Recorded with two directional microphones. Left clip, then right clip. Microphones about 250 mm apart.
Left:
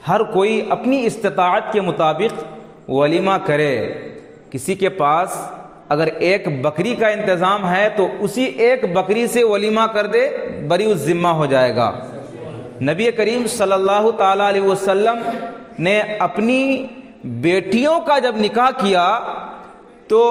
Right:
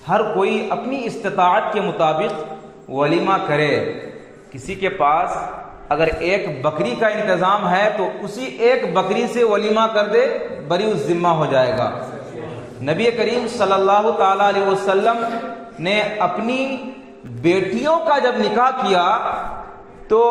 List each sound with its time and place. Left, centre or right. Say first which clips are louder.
0.1 s a man's voice: left 1 dB; left